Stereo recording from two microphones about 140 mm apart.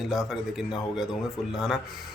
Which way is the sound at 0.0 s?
5° right (ahead or behind).